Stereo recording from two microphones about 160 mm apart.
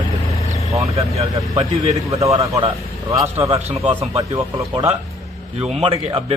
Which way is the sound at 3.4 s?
40° right (ahead or behind).